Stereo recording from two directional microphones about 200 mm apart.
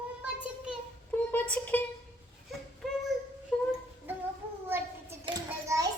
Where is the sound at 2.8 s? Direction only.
Centre (ahead or behind).